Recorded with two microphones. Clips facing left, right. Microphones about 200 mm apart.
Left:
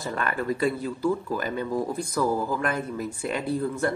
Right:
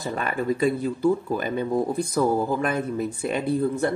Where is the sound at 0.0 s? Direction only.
20° right (ahead or behind).